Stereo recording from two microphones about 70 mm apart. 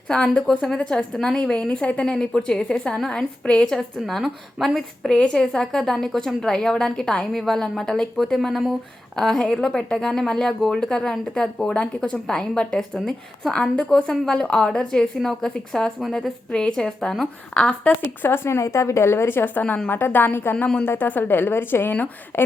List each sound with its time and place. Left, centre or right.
0.1 s a woman's voice: centre
3.7 s a woman's voice: centre
18.2 s a woman's voice: left